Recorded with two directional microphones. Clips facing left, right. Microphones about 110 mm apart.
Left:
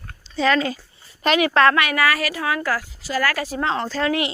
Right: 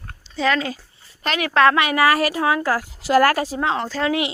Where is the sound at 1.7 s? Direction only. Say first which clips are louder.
Right 3 dB; 25° right (ahead or behind).